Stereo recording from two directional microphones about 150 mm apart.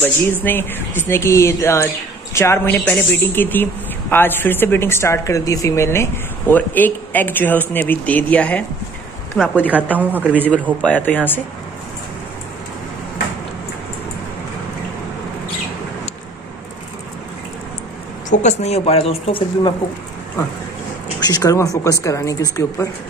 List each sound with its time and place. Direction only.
0.0 s a woman's voice: 15° left (ahead or behind)
9.7 s a woman's voice: 10° right (ahead or behind)
10.5 s a woman's voice: 10° left (ahead or behind)
18.3 s a woman's voice: 50° left (ahead or behind)
21.3 s a woman's voice: 25° left (ahead or behind)